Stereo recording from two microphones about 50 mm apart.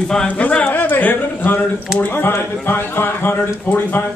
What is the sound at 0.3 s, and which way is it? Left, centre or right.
Speech, left.